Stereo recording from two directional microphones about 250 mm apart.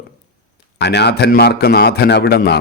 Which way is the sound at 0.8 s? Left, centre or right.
Left.